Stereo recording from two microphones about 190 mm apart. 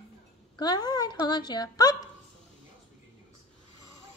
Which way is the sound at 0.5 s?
20° left (ahead or behind).